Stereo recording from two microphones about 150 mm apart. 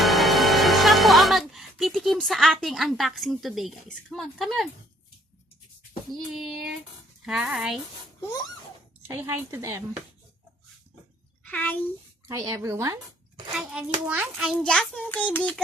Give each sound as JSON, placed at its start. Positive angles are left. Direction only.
{"t": 0.0, "sound": "speech", "side_deg": 0}
{"t": 6.1, "sound": "a child's voice", "side_deg": 0}
{"t": 9.0, "sound": "a woman's voice", "side_deg": -20}
{"t": 11.4, "sound": "a woman's voice", "side_deg": 10}
{"t": 12.3, "sound": "speech", "side_deg": -20}
{"t": 13.5, "sound": "a child's voice", "side_deg": -5}